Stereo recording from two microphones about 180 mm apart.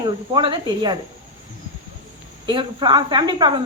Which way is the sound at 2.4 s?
25° right (ahead or behind).